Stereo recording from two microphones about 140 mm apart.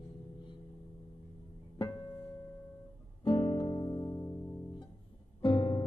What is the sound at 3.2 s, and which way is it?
Music, 35° left (ahead or behind).